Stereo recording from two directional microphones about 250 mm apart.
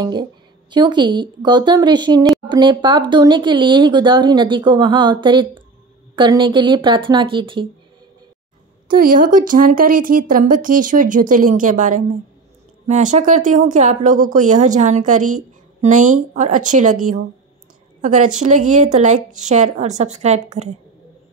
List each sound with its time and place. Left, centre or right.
0.0 s a woman's voice: centre
8.8 s a woman's voice: right
18.0 s a woman's voice: right